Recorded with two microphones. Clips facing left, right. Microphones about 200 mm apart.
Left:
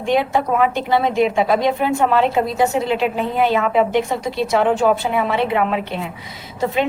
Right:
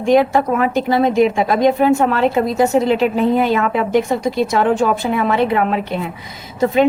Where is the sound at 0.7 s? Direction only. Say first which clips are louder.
Right 3 dB; 45° right (ahead or behind).